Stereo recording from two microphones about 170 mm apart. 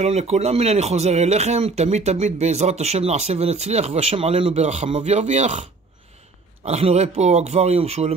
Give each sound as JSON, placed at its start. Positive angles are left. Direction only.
{"t": 0.0, "sound": "speech", "side_deg": -40}